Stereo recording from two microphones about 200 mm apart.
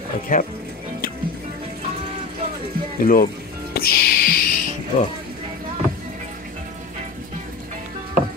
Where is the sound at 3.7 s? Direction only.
50° left (ahead or behind).